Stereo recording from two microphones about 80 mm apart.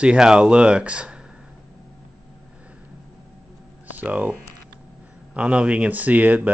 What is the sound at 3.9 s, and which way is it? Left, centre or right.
Speech, centre.